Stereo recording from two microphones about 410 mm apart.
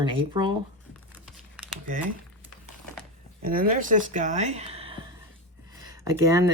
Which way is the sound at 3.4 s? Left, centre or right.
Centre.